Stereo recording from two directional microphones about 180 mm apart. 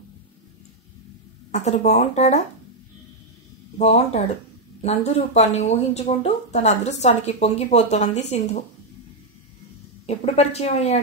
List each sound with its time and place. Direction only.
1.5 s speech: 40° left (ahead or behind)
3.7 s speech: 35° left (ahead or behind)
10.0 s speech: 35° left (ahead or behind)